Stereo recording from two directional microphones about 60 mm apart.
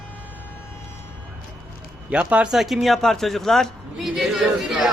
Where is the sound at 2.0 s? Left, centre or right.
Right.